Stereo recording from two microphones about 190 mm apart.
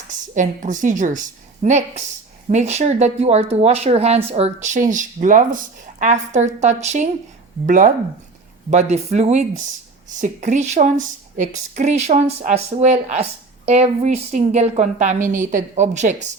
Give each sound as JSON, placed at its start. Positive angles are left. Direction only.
{"t": 0.1, "sound": "a woman's voice", "side_deg": -40}